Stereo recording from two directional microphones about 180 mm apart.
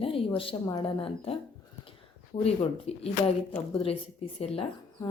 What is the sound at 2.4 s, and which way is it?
Speech, 35° left (ahead or behind).